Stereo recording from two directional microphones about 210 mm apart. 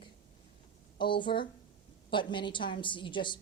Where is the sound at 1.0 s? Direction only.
25° left (ahead or behind).